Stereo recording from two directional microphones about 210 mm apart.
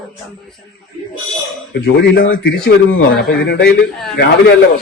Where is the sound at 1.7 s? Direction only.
55° left (ahead or behind).